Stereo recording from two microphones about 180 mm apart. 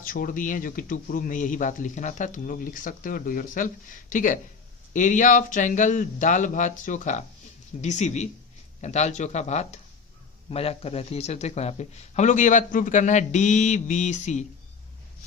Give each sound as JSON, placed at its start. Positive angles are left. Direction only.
{"t": 0.0, "sound": "speech", "side_deg": 50}